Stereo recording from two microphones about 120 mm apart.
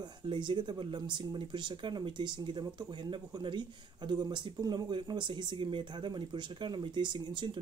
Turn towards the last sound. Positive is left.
turn(degrees=-40)  # may be behind; listen again after turning